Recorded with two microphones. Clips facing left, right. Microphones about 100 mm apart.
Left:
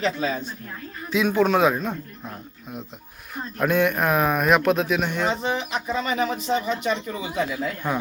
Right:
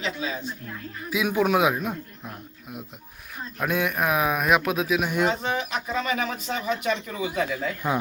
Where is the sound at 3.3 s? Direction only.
Centre (ahead or behind).